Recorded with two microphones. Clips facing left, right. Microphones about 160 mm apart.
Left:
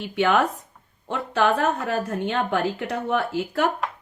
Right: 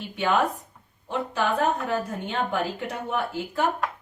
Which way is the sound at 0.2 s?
75° left (ahead or behind).